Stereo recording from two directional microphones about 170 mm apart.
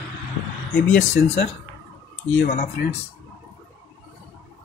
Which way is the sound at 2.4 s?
45° left (ahead or behind).